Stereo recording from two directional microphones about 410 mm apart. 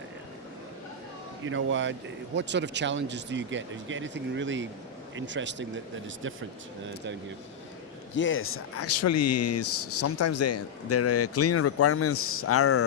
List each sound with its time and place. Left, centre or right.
1.5 s speech: right
8.1 s speech: left